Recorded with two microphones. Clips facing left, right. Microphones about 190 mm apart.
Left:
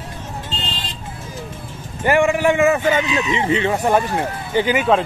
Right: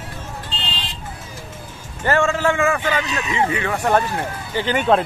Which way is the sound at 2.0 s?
15° left (ahead or behind).